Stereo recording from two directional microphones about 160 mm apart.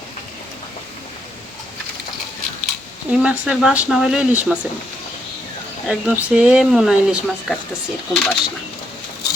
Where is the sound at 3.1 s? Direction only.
5° right (ahead or behind).